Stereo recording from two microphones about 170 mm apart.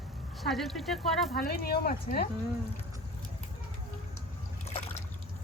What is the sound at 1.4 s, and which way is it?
Speech, 65° left (ahead or behind).